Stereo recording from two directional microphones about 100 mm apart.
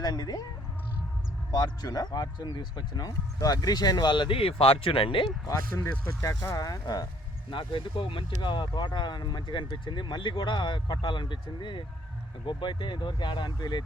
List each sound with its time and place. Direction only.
0.0 s speech: 40° left (ahead or behind)
1.5 s speech: 40° left (ahead or behind); by 5.3 s 60° left (ahead or behind)
5.5 s speech: 30° left (ahead or behind)
7.5 s speech: 55° left (ahead or behind)